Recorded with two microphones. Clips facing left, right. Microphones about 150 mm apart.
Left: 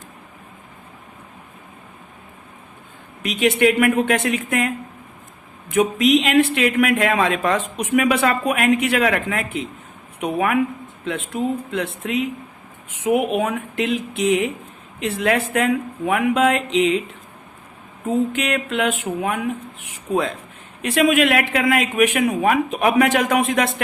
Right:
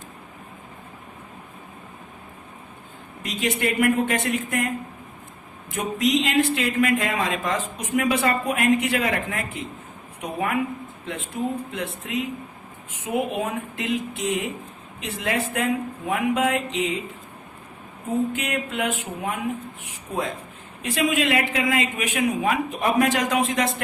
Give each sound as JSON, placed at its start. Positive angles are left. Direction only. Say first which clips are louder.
{"t": 3.2, "sound": "a man's voice", "louder": "left 8 dB", "side_deg": 70}
{"t": 5.7, "sound": "a man's voice", "louder": "left 6 dB", "side_deg": 75}
{"t": 11.7, "sound": "speech", "louder": "left 5 dB", "side_deg": 90}
{"t": 18.3, "sound": "speech", "louder": "left 5 dB", "side_deg": 85}
{"t": 20.8, "sound": "a man's voice", "louder": "left 6 dB", "side_deg": 75}